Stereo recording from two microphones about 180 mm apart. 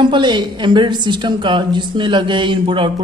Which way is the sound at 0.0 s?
25° right (ahead or behind).